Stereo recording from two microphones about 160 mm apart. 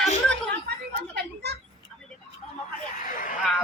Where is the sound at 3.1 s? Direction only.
55° left (ahead or behind).